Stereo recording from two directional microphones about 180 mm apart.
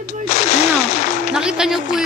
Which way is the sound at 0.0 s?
40° left (ahead or behind).